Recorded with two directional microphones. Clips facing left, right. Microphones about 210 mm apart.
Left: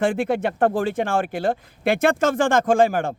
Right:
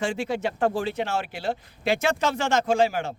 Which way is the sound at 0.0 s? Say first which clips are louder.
Left 6 dB; 55° left (ahead or behind).